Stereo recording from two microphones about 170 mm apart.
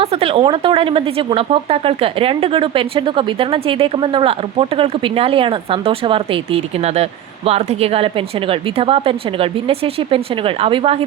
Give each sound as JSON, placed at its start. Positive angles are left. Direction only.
{"t": 0.0, "sound": "speech", "side_deg": -35}